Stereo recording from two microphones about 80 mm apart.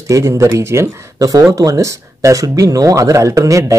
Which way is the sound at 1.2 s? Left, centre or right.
Right.